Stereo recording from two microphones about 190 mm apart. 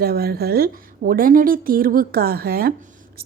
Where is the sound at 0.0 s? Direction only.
55° right (ahead or behind).